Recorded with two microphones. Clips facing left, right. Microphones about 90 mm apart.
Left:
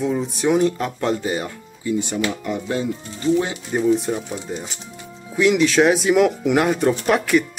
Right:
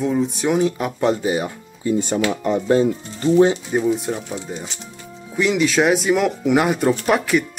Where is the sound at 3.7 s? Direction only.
5° right (ahead or behind).